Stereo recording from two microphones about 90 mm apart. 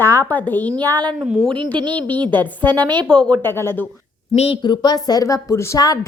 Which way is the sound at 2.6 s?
55° right (ahead or behind).